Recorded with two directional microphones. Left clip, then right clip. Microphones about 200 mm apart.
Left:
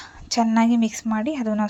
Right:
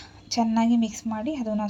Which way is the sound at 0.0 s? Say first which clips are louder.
Left 4 dB; 20° left (ahead or behind).